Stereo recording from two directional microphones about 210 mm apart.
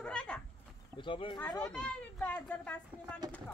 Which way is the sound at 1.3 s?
10° left (ahead or behind).